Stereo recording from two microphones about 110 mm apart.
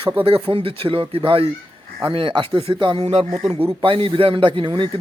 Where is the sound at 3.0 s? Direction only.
75° right (ahead or behind).